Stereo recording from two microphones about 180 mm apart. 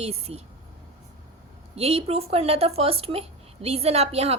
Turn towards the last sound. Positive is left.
turn(degrees=-35)  # may be behind; listen again after turning